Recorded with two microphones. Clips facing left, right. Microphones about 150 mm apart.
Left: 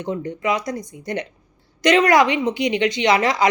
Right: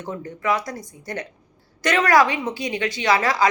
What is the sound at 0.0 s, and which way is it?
A woman's voice, 20° left (ahead or behind).